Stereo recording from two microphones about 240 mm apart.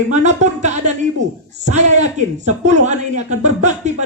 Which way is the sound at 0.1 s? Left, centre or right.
Right.